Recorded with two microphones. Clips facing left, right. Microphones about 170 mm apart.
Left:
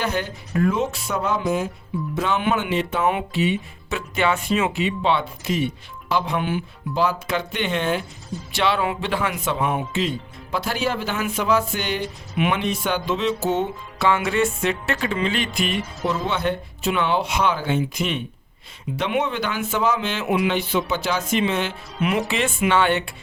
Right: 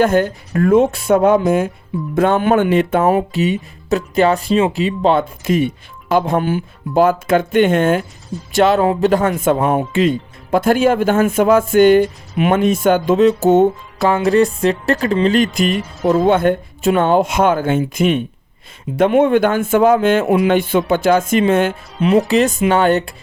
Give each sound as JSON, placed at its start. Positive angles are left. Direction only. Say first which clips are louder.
{"t": 0.0, "sound": "speech", "louder": "right 11 dB", "side_deg": -50}